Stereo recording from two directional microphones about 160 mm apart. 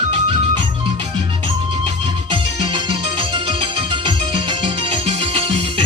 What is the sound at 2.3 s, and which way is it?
Music, 30° right (ahead or behind).